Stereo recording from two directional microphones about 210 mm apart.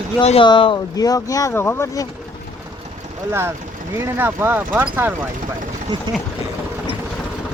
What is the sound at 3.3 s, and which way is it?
Speech, 10° right (ahead or behind).